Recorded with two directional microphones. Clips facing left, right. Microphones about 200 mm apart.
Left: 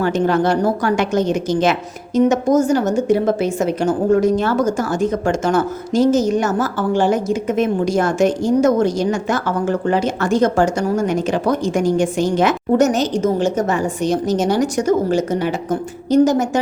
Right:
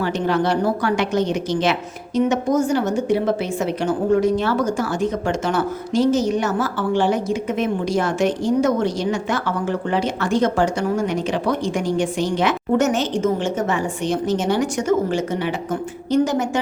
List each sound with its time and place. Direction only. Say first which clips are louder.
0.0 s a woman's voice: left 4 dB; 45° left (ahead or behind)